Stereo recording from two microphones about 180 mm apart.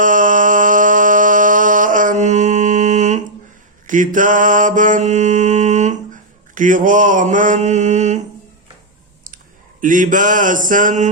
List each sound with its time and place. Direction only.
0.0 s mantra: 45° right (ahead or behind)
9.8 s mantra: 45° right (ahead or behind)